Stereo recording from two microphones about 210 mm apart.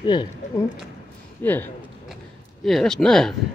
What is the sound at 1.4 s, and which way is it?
A man's voice, 10° left (ahead or behind).